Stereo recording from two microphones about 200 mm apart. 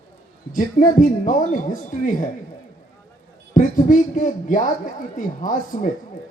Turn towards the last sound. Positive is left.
turn(degrees=40)  # may be behind; listen again after turning